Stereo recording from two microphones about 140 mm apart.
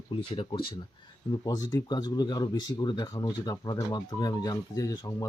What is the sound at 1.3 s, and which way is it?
Speech, 30° left (ahead or behind).